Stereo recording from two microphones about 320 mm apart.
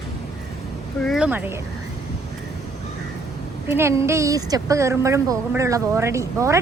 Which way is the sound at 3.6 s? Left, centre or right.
Centre.